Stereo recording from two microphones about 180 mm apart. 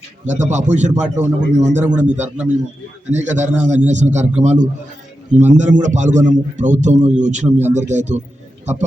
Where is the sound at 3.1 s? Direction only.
40° right (ahead or behind).